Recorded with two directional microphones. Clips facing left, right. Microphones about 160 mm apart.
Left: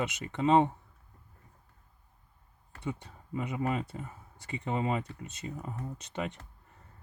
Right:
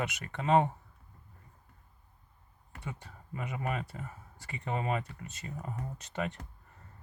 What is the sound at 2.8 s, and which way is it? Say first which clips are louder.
Speech: left 6 dB; 20° left (ahead or behind).